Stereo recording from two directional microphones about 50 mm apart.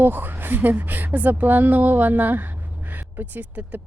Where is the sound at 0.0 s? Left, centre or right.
Right.